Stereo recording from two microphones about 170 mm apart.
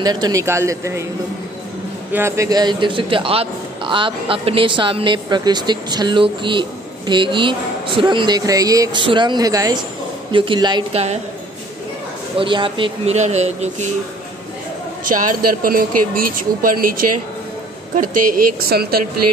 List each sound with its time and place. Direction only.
0.0 s a man's voice: 25° right (ahead or behind)
2.1 s a man's voice: 15° right (ahead or behind); by 11.1 s 35° right (ahead or behind)
12.4 s a man's voice: 30° right (ahead or behind)
15.0 s speech: 50° right (ahead or behind)